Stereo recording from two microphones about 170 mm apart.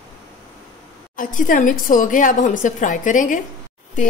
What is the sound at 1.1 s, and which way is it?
A woman's voice, 50° left (ahead or behind).